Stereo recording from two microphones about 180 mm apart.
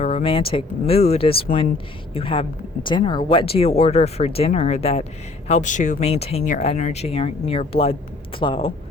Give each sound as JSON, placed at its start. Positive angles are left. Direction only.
{"t": 0.0, "sound": "speech", "side_deg": 30}